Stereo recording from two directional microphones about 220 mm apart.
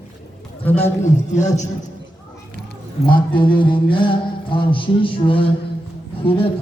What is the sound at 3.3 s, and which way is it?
Music, 20° left (ahead or behind).